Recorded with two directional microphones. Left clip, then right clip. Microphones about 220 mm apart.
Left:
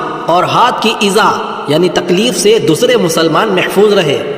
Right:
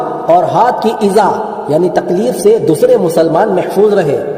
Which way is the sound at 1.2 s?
30° left (ahead or behind).